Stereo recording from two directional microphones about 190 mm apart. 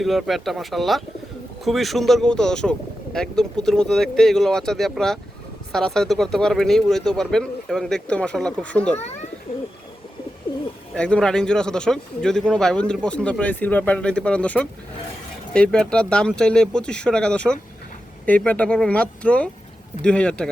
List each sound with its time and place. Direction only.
0.0 s speech: centre (ahead or behind)
9.0 s speech: 35° left (ahead or behind)
10.9 s speech: 5° left (ahead or behind)